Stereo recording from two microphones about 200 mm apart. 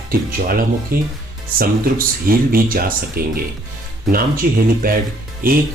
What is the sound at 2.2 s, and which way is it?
Speech, 45° right (ahead or behind).